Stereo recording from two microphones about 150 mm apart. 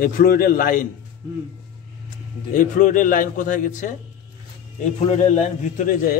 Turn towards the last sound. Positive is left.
turn(degrees=55)  # may be behind; listen again after turning